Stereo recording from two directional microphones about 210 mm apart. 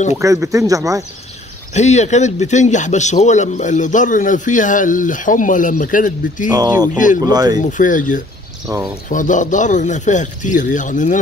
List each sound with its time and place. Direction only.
0.1 s speech: 15° right (ahead or behind)
1.7 s a man's voice: 30° left (ahead or behind)
6.5 s speech: 20° right (ahead or behind)
7.5 s a man's voice: 40° left (ahead or behind)
8.7 s speech: 15° right (ahead or behind)
9.1 s a man's voice: 40° left (ahead or behind)